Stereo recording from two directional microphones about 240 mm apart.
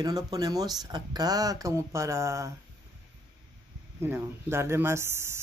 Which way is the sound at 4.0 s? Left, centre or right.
Centre.